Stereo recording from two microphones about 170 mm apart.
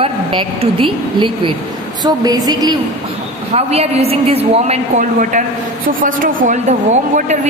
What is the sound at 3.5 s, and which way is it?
A woman's voice, 35° right (ahead or behind).